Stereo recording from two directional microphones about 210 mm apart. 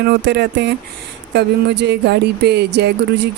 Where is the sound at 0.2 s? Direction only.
55° right (ahead or behind).